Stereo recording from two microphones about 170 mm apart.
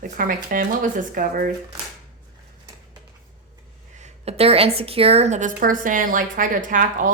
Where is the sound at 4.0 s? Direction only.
40° right (ahead or behind).